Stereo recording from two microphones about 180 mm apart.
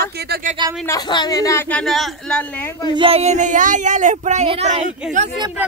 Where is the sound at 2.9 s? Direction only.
30° right (ahead or behind).